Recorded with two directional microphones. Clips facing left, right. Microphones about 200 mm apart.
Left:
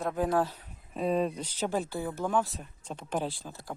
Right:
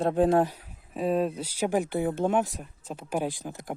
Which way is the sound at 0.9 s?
5° right (ahead or behind).